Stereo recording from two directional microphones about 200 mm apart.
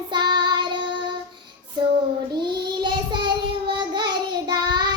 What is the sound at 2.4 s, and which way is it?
Child singing, 20° right (ahead or behind).